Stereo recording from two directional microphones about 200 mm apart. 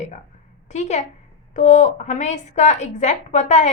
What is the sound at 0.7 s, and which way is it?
A woman's voice, 35° left (ahead or behind).